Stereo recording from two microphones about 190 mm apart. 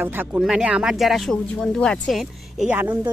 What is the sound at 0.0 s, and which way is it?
Speech, 10° right (ahead or behind).